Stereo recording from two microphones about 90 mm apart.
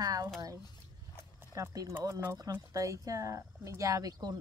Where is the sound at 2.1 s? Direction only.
30° right (ahead or behind).